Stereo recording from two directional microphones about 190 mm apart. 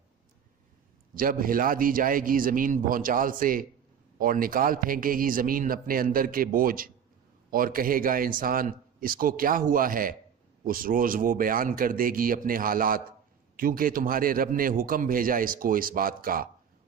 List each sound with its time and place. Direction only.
1.1 s a man's voice: 45° right (ahead or behind)